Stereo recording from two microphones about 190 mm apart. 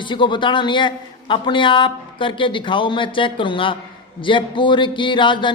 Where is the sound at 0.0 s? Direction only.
25° left (ahead or behind).